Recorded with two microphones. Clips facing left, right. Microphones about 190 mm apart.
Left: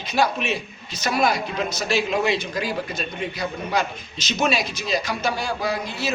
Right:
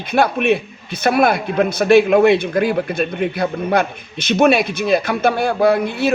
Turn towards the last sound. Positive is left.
turn(degrees=-60)  # may be behind; listen again after turning